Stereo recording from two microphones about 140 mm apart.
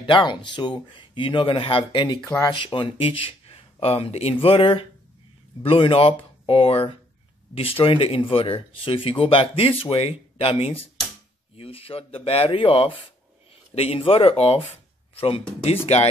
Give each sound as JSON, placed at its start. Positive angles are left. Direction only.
{"t": 0.0, "sound": "speech", "side_deg": 35}